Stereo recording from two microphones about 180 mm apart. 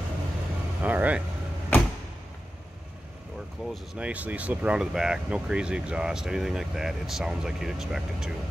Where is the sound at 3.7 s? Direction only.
5° right (ahead or behind).